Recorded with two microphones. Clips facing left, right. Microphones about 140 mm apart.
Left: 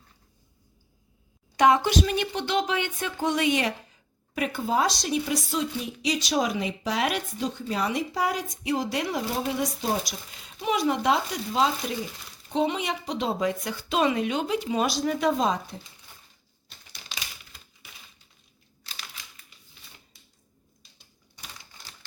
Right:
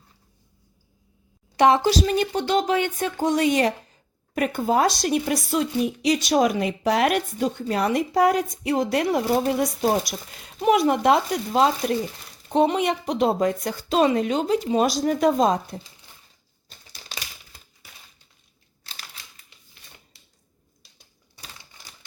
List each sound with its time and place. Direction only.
1.5 s speech: 30° right (ahead or behind)
4.4 s a woman's voice: 50° right (ahead or behind)